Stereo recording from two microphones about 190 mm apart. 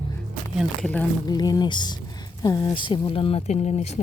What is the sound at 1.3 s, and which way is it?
Speech, 20° left (ahead or behind).